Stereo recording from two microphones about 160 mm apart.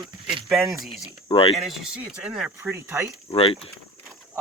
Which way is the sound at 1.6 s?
Centre (ahead or behind).